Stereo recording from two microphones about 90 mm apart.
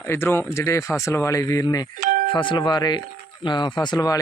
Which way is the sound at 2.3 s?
65° left (ahead or behind).